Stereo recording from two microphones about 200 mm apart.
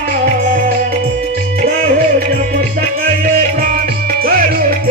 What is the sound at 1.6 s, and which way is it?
Music, 45° right (ahead or behind).